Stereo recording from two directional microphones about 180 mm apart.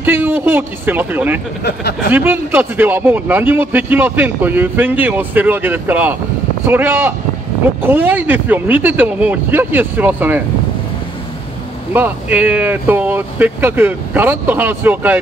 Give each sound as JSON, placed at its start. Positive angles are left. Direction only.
{"t": 0.0, "sound": "speech", "side_deg": -10}
{"t": 1.6, "sound": "speech", "side_deg": 65}
{"t": 2.0, "sound": "speech", "side_deg": -10}
{"t": 11.9, "sound": "speech", "side_deg": -10}